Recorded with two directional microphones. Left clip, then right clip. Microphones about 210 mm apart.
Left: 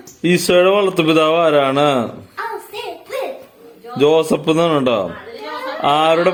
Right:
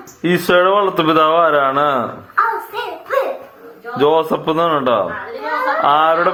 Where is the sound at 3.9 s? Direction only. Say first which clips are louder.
Even; 40° left (ahead or behind).